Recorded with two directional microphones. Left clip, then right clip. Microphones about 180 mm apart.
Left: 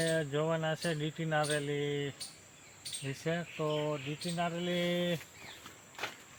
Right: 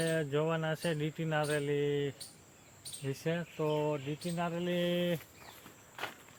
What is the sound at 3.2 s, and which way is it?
Speech, 30° right (ahead or behind).